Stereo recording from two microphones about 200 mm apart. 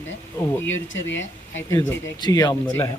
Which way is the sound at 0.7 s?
70° left (ahead or behind).